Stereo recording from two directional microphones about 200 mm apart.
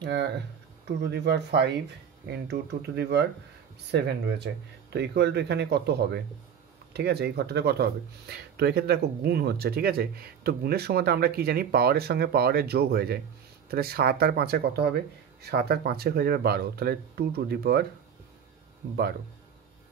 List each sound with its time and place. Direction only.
0.0 s speech: 60° right (ahead or behind)